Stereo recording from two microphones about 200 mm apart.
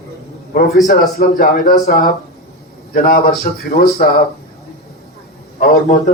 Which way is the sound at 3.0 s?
45° left (ahead or behind).